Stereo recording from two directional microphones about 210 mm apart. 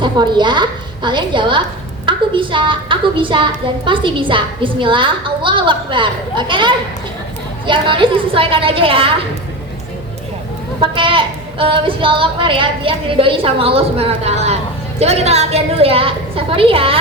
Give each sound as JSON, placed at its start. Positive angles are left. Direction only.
{"t": 0.0, "sound": "a woman's voice", "side_deg": -20}
{"t": 10.8, "sound": "a woman's voice", "side_deg": -25}